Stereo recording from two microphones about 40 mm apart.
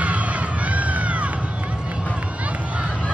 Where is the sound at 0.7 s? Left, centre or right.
Right.